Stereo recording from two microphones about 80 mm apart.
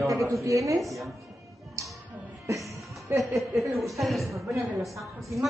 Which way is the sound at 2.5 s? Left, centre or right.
Right.